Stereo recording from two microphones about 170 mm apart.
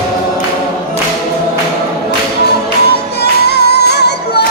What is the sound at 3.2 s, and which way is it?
Music, 75° left (ahead or behind).